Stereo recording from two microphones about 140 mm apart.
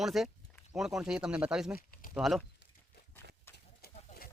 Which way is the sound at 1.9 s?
80° left.